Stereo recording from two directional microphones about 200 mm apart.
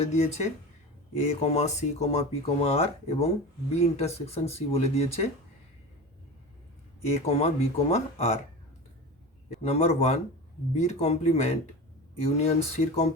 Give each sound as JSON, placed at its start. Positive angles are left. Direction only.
{"t": 0.0, "sound": "speech", "side_deg": 35}
{"t": 7.1, "sound": "speech", "side_deg": 30}
{"t": 9.6, "sound": "speech", "side_deg": 30}